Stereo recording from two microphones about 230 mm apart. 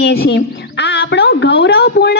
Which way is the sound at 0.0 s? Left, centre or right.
Left.